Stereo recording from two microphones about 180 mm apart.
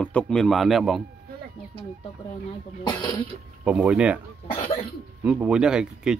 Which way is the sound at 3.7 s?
5° right (ahead or behind).